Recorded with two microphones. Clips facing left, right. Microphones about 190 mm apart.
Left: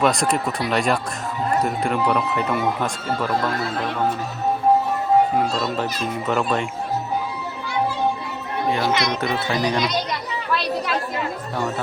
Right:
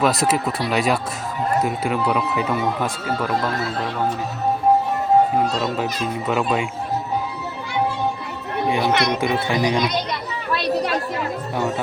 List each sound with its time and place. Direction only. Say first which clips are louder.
0.0 s speech: right 1 dB; 5° right (ahead or behind)
5.8 s speech: right 1 dB; 5° right (ahead or behind)
8.9 s speech: right 2 dB; 60° right (ahead or behind)
9.2 s speech: right 2 dB; 10° right (ahead or behind)